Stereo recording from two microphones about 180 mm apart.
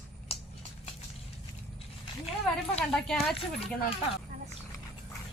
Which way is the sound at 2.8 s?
5° left (ahead or behind).